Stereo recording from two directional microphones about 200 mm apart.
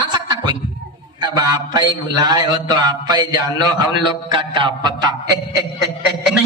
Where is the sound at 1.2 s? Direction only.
20° right (ahead or behind).